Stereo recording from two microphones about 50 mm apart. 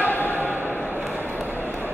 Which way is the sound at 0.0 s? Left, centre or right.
Left.